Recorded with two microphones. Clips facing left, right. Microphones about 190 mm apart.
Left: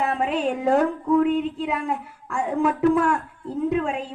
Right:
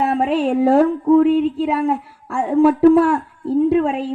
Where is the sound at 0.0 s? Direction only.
35° right (ahead or behind).